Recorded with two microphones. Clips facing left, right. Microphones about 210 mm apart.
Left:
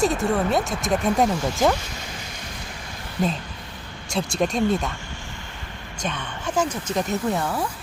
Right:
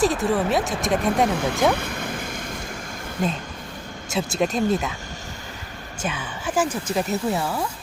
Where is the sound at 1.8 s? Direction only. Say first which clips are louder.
Right 7 dB; 55° right (ahead or behind).